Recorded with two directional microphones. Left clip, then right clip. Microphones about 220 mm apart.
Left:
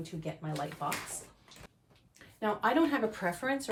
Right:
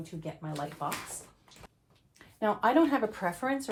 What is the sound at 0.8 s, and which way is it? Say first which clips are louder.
Speech: right 1 dB; 20° right (ahead or behind).